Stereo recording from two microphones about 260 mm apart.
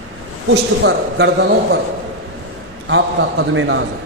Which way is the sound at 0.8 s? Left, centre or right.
Right.